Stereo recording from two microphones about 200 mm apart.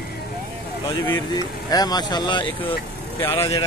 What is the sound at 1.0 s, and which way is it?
Speech, 15° left (ahead or behind).